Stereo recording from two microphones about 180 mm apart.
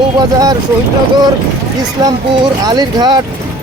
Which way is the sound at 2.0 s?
25° right (ahead or behind).